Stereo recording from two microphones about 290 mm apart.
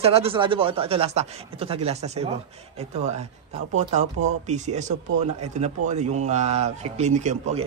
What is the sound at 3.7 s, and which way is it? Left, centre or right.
Speech, right.